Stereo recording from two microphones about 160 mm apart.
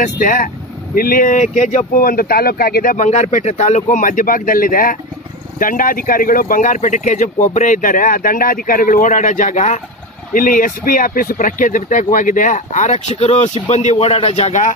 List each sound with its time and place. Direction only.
0.0 s speech: 55° left (ahead or behind)